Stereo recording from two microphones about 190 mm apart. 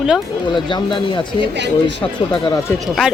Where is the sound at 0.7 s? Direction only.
25° left (ahead or behind).